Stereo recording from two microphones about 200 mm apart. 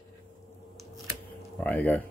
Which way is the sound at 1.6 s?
5° left (ahead or behind).